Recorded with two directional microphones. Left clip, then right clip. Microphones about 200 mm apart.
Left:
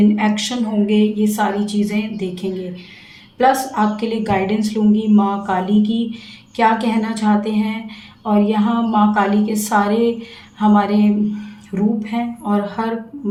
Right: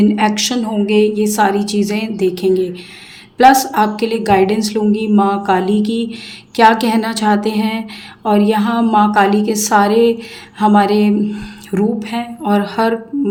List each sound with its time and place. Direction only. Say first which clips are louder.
0.0 s a woman's voice: right 4 dB; 40° right (ahead or behind)